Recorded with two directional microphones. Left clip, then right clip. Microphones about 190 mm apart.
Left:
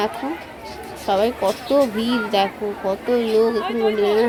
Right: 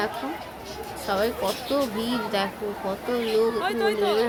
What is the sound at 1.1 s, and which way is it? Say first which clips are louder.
Speech: left 6 dB; 20° left (ahead or behind).